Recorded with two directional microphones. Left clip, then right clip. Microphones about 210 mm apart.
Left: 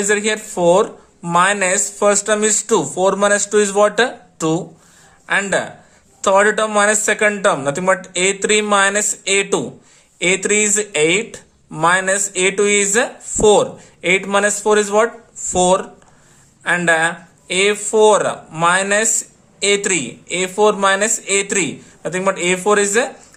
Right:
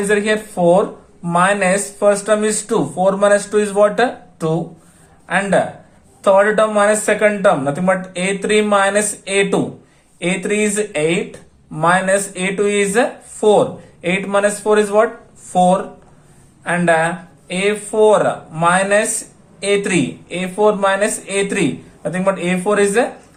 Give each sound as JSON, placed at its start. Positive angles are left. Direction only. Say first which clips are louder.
{"t": 0.1, "sound": "speech", "louder": "right 3 dB", "side_deg": 35}